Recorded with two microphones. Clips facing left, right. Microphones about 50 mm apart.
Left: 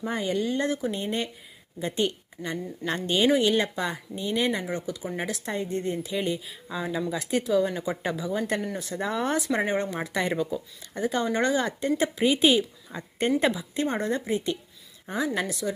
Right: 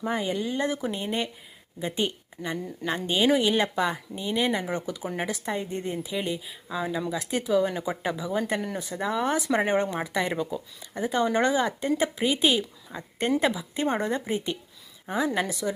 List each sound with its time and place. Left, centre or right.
0.0 s speech: centre
9.6 s speech: centre
10.0 s speech: centre
13.8 s a woman's voice: centre